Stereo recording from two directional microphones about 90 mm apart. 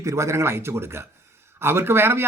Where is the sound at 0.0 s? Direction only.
35° right (ahead or behind).